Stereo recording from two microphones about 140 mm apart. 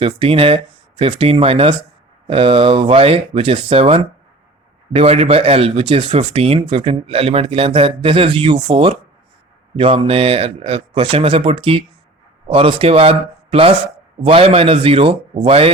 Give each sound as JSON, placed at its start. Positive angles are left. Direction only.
{"t": 0.0, "sound": "speech", "side_deg": -40}